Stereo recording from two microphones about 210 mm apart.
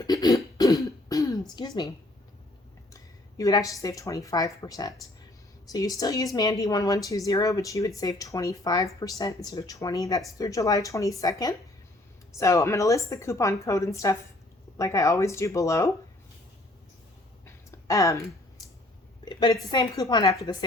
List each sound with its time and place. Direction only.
0.0 s a woman's voice: 20° left (ahead or behind)
0.5 s throat clearing: 15° left (ahead or behind)
1.5 s a sound: 20° left (ahead or behind)
2.9 s a woman's voice: 15° left (ahead or behind)
17.4 s a sound: 15° left (ahead or behind)
19.2 s a woman's voice: 20° left (ahead or behind)